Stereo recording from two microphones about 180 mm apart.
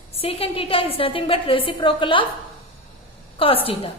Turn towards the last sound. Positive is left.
turn(degrees=30)  # may be behind; listen again after turning